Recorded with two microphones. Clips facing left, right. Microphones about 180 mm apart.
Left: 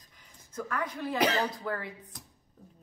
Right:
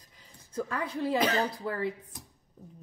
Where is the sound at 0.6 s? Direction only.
30° right (ahead or behind).